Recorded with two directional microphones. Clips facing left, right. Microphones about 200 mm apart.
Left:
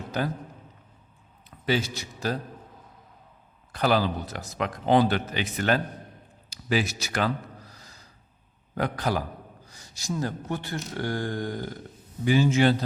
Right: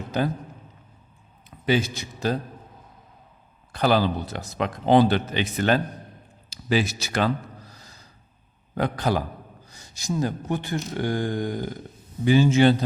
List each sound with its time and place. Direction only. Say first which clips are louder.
1.5 s a man's voice: right 4 dB; 20° right (ahead or behind)
3.7 s speech: right 3 dB; 30° right (ahead or behind)
7.7 s gasp: right 2 dB; 25° right (ahead or behind)
8.7 s a man's voice: right 3 dB; 25° right (ahead or behind)
12.2 s speech: right 4 dB; 25° right (ahead or behind)